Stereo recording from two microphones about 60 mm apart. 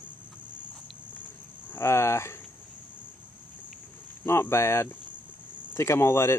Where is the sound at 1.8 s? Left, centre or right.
Left.